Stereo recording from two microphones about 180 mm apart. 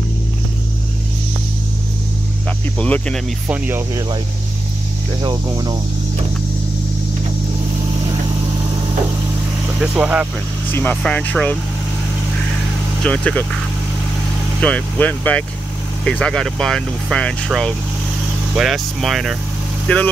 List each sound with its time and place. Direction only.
2.8 s speech: 5° left (ahead or behind)
3.4 s speech: 10° right (ahead or behind)
5.2 s speech: 25° right (ahead or behind)
9.8 s speech: 10° right (ahead or behind)
10.7 s speech: 10° left (ahead or behind)
13.0 s speech: 10° left (ahead or behind)
14.6 s speech: 10° left (ahead or behind)